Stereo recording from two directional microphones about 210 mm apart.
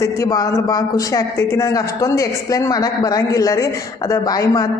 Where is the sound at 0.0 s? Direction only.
15° left (ahead or behind).